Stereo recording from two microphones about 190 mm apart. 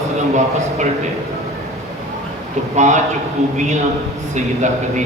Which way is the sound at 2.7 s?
40° right (ahead or behind).